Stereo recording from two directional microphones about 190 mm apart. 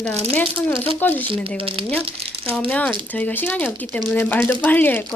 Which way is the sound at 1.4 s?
30° right (ahead or behind).